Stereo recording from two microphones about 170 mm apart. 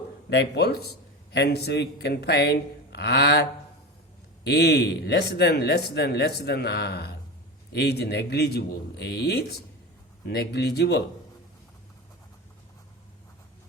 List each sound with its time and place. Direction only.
0.3 s a man's voice: 85° left
4.4 s a man's voice: 75° left (ahead or behind)